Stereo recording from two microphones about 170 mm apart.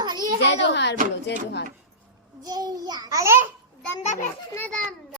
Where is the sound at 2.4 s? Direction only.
20° right (ahead or behind).